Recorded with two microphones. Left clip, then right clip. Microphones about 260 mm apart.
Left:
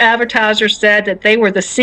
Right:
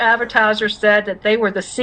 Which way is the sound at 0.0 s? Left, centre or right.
Left.